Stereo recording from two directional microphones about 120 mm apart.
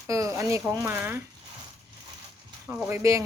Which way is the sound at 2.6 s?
15° right (ahead or behind).